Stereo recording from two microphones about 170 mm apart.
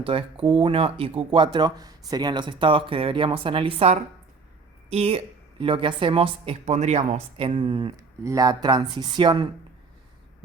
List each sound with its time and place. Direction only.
0.0 s speech: 30° right (ahead or behind)